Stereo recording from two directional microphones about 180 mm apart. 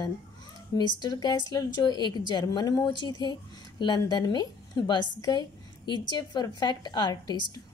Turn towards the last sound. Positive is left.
turn(degrees=20)  # may be behind; listen again after turning